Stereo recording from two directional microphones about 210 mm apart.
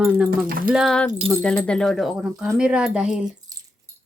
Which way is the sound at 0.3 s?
45° right (ahead or behind).